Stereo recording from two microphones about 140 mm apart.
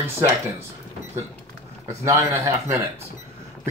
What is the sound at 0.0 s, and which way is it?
Speech, 20° right (ahead or behind).